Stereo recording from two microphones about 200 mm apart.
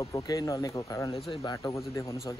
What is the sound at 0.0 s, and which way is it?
Speech, 15° left (ahead or behind).